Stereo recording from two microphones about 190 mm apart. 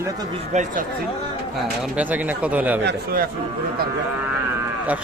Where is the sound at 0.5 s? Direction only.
35° right (ahead or behind).